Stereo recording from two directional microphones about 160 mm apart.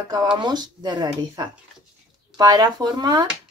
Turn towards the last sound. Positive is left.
turn(degrees=-25)  # may be behind; listen again after turning